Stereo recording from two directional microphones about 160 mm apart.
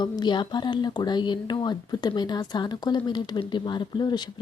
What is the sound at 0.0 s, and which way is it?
Speech, 30° left (ahead or behind).